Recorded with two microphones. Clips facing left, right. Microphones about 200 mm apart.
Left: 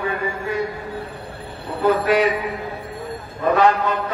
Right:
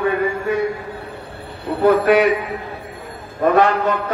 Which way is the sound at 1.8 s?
60° right (ahead or behind).